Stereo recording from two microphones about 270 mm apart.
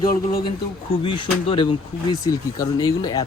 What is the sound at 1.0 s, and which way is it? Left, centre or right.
Speech, centre.